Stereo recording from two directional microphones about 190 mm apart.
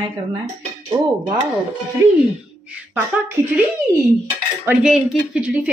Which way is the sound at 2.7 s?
10° right (ahead or behind).